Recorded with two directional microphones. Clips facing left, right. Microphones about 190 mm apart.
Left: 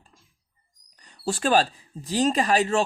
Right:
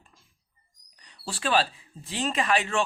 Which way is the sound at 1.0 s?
45° left (ahead or behind).